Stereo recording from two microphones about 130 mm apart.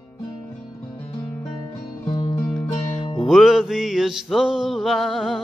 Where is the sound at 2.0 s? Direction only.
40° left (ahead or behind).